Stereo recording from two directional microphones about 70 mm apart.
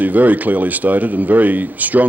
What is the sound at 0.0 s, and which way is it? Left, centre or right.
Speech, right.